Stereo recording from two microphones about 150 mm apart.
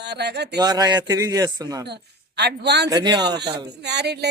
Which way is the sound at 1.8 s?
90° right.